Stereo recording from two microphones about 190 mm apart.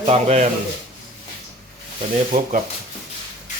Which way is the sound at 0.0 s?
35° right (ahead or behind).